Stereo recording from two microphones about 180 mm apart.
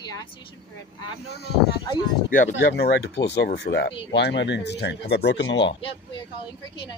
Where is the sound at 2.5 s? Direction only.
65° left (ahead or behind); by 5.8 s 90° left.